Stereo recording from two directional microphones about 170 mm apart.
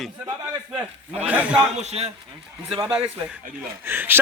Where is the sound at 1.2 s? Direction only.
10° right (ahead or behind).